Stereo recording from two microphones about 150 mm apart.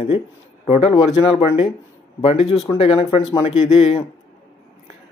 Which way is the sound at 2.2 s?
40° left (ahead or behind).